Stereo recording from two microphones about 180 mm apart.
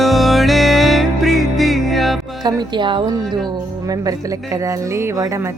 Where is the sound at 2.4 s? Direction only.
25° right (ahead or behind).